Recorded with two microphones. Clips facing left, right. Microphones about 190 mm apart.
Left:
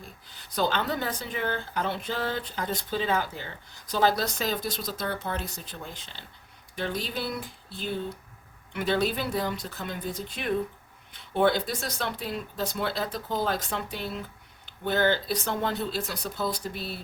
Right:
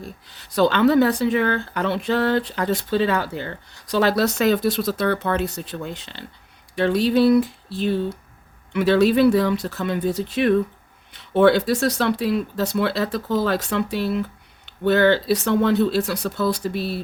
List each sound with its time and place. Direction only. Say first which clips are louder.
0.0 s speech: right 9 dB; 75° right (ahead or behind)